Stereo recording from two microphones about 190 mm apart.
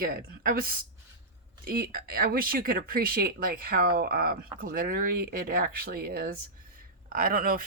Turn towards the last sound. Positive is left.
turn(degrees=-50)  # may be behind; listen again after turning